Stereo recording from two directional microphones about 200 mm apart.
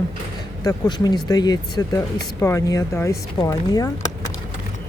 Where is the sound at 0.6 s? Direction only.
20° left (ahead or behind).